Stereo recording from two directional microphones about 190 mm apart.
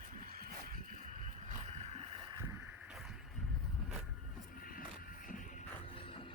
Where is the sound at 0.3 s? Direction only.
50° right (ahead or behind).